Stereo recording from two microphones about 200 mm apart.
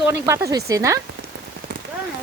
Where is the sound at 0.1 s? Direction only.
15° right (ahead or behind).